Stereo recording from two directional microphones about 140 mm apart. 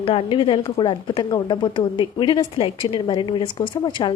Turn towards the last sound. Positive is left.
turn(degrees=35)  # may be behind; listen again after turning